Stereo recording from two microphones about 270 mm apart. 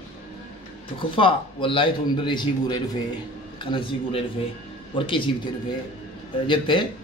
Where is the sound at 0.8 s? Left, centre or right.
Centre.